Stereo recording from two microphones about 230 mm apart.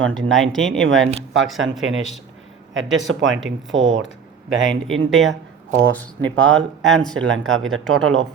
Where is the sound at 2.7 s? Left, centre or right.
Right.